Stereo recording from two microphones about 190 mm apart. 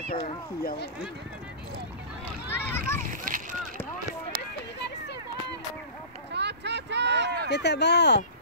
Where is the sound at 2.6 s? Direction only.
10° left (ahead or behind).